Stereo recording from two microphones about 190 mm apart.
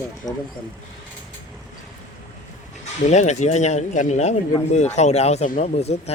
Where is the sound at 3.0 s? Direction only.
40° left (ahead or behind).